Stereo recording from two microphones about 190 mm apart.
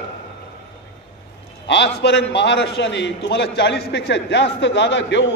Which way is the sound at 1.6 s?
65° left (ahead or behind).